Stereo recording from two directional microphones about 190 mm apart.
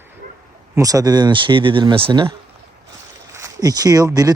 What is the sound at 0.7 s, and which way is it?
Speech, 20° right (ahead or behind).